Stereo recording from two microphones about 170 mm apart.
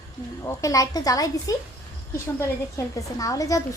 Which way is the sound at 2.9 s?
20° left (ahead or behind).